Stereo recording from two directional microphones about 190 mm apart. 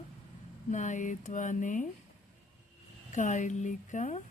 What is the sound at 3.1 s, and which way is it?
A woman's voice, 40° left (ahead or behind).